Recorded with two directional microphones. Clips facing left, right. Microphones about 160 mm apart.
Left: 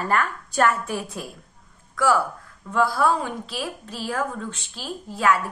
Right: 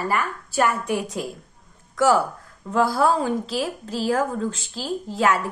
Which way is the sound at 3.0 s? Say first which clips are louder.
Right 2 dB; 35° right (ahead or behind).